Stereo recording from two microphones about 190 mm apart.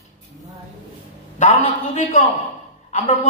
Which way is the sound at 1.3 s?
35° left (ahead or behind).